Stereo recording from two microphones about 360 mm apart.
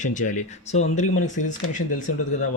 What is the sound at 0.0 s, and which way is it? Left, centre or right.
Speech, left.